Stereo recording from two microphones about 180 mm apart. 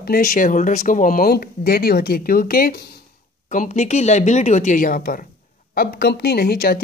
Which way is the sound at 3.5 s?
45° left (ahead or behind).